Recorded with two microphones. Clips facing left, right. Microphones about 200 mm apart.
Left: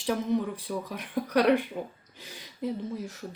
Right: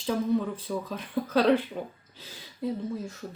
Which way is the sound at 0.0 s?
15° left (ahead or behind).